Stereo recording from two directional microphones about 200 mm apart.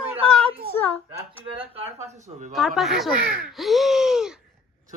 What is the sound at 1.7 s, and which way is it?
Speech, 30° right (ahead or behind).